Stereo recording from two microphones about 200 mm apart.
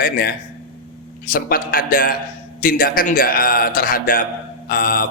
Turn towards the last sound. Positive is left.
turn(degrees=45)  # may be behind; listen again after turning